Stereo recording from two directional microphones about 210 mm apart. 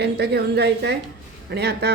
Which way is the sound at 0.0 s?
50° right (ahead or behind).